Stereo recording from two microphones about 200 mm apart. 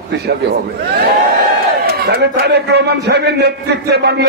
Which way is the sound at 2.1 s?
55° right (ahead or behind).